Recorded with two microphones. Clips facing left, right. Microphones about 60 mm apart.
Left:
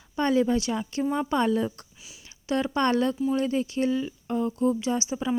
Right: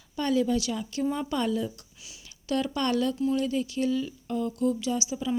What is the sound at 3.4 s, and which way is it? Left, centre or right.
Speech, left.